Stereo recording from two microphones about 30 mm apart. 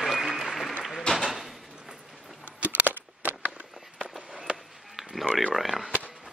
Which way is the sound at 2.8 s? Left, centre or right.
Right.